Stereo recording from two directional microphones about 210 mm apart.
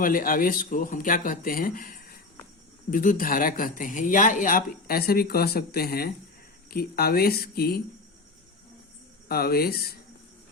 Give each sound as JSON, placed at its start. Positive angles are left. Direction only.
{"t": 0.0, "sound": "speech", "side_deg": 40}
{"t": 9.3, "sound": "speech", "side_deg": 45}